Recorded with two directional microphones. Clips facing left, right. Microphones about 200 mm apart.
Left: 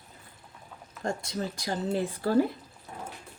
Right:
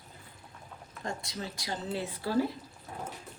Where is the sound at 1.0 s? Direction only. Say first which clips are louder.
Left 6 dB; 50° left (ahead or behind).